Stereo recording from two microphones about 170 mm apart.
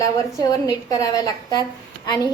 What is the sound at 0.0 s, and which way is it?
A woman's voice, 20° left (ahead or behind).